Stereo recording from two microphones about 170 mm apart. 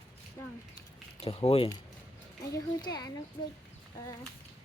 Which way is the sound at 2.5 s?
25° left (ahead or behind).